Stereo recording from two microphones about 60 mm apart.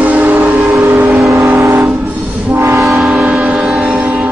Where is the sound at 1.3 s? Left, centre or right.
Right.